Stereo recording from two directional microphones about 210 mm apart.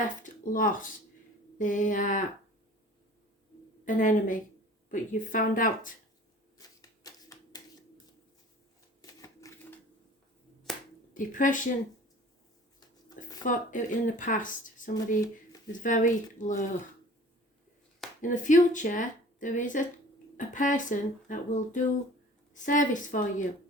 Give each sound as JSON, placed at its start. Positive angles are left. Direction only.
{"t": 0.2, "sound": "speech", "side_deg": 40}
{"t": 3.8, "sound": "speech", "side_deg": 40}
{"t": 6.6, "sound": "shuffling cards", "side_deg": 15}
{"t": 9.0, "sound": "typewriter", "side_deg": 15}
{"t": 10.7, "sound": "finger snapping", "side_deg": 0}
{"t": 11.1, "sound": "speech", "side_deg": 40}
{"t": 13.1, "sound": "speech", "side_deg": 40}
{"t": 18.2, "sound": "speech", "side_deg": 40}